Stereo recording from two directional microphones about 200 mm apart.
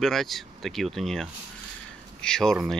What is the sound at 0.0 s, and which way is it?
Speech, centre (ahead or behind).